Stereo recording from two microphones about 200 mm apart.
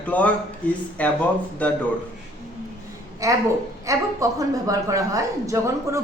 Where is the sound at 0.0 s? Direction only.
5° left (ahead or behind).